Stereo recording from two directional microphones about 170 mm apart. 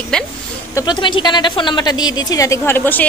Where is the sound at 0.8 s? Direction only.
25° left (ahead or behind).